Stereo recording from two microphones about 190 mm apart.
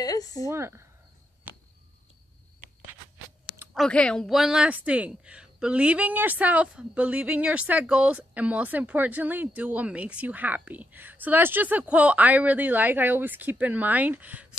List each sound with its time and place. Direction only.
0.0 s a sound: 20° left (ahead or behind)
0.5 s speech: 15° right (ahead or behind)
3.7 s speech: 5° left (ahead or behind)